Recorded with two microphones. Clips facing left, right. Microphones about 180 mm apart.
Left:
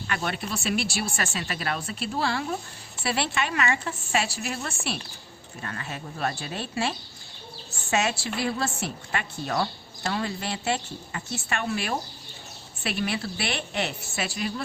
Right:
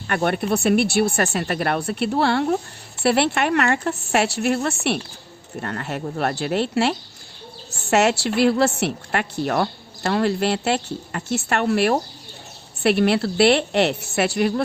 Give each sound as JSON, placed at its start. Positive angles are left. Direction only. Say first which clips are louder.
{"t": 0.1, "sound": "a woman's voice", "louder": "right 10 dB", "side_deg": -55}